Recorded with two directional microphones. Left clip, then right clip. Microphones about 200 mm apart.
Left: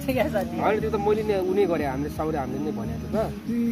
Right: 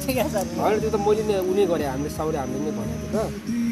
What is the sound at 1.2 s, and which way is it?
Speech, 15° right (ahead or behind).